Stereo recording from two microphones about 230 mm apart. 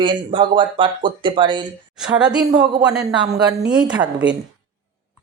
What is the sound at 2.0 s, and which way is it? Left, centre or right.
A woman's voice, centre.